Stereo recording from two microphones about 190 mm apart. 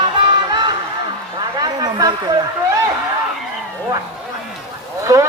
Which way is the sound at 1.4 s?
20° right (ahead or behind).